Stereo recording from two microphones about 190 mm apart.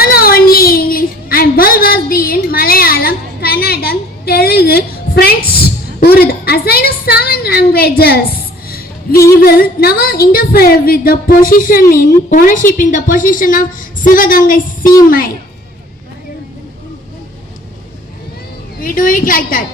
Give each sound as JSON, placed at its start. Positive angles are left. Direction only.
{"t": 0.0, "sound": "a sound", "side_deg": 50}
{"t": 9.3, "sound": "a woman's voice", "side_deg": 50}
{"t": 18.8, "sound": "a woman's voice", "side_deg": 45}